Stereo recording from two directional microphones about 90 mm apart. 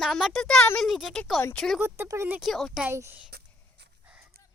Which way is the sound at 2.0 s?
35° right (ahead or behind).